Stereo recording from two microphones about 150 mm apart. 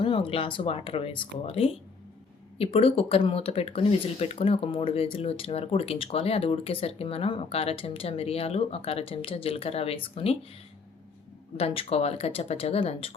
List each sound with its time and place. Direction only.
0.0 s speech: 35° left (ahead or behind)
11.5 s speech: 40° left (ahead or behind)